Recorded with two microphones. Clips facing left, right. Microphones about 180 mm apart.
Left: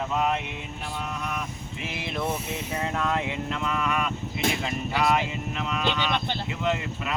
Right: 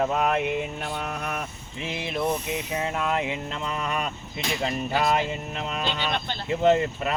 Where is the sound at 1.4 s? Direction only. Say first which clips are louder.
Even; 25° right (ahead or behind).